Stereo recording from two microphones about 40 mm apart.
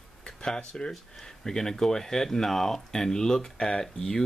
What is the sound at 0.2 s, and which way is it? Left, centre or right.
Speech, centre.